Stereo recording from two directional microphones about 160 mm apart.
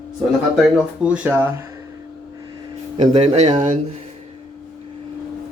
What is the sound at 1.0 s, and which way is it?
Speech, 10° right (ahead or behind).